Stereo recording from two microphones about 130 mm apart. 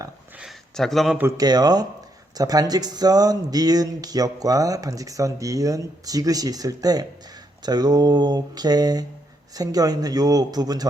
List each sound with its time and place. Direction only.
0.3 s speech: centre (ahead or behind)
1.4 s speech: 30° right (ahead or behind)